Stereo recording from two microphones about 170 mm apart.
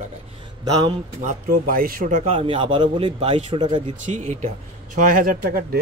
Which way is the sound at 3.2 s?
40° right (ahead or behind).